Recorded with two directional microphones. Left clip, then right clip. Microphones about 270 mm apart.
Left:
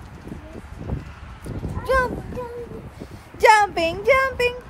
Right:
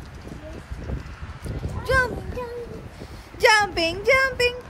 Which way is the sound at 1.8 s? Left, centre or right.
Centre.